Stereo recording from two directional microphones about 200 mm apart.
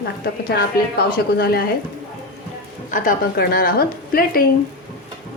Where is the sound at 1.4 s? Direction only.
50° left (ahead or behind).